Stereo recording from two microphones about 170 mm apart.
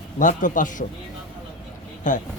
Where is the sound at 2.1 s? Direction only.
50° left (ahead or behind).